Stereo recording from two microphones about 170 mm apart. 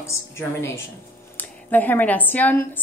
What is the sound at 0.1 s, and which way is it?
A woman's voice, 15° left (ahead or behind).